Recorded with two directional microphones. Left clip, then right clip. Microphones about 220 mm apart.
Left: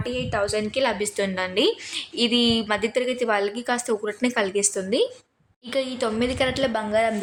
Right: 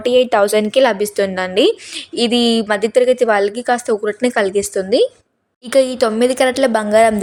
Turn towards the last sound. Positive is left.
turn(degrees=-40)  # may be behind; listen again after turning